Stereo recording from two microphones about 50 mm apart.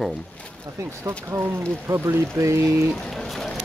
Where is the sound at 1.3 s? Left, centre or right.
Right.